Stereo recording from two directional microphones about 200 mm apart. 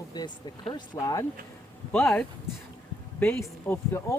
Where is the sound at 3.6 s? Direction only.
10° left (ahead or behind).